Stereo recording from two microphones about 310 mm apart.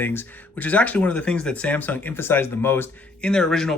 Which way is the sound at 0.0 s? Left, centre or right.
Centre.